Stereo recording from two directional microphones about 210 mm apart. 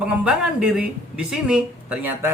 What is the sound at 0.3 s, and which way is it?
Speech, 5° right (ahead or behind).